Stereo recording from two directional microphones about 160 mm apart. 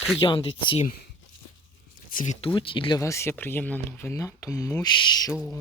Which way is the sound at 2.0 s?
55° left (ahead or behind).